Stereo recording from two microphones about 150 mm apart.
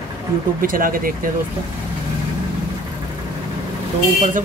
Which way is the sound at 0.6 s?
70° right (ahead or behind).